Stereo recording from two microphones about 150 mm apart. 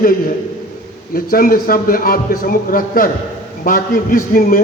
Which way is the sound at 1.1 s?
75° left (ahead or behind).